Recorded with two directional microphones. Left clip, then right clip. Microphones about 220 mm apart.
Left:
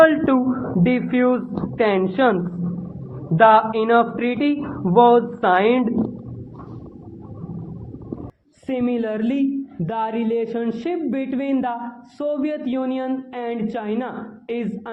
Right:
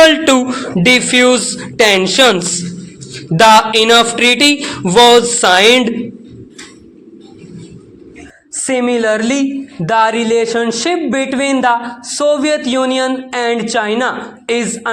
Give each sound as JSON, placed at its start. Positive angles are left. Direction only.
{"t": 0.0, "sound": "speech", "side_deg": -35}
{"t": 1.8, "sound": "a sound", "side_deg": -35}
{"t": 8.6, "sound": "a man's voice", "side_deg": -10}